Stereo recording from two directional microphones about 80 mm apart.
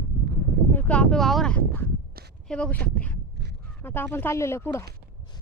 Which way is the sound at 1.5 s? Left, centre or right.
Left.